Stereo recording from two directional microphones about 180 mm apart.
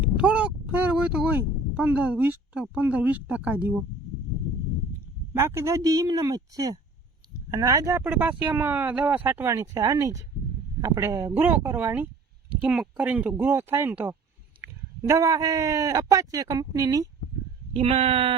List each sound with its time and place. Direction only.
0.0 s speech: 10° right (ahead or behind)
5.3 s speech: 15° right (ahead or behind)
17.7 s speech: 30° right (ahead or behind)